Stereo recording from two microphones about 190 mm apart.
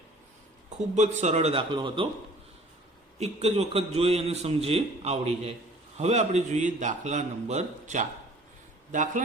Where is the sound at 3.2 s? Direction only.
35° right (ahead or behind).